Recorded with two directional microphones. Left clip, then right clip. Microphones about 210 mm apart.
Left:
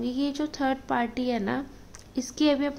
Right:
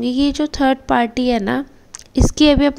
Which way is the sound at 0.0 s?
35° right (ahead or behind).